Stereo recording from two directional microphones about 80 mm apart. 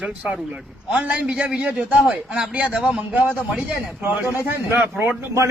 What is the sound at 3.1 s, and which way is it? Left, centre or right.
A man's voice, right.